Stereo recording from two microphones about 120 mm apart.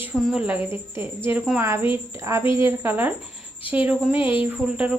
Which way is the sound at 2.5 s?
20° right (ahead or behind).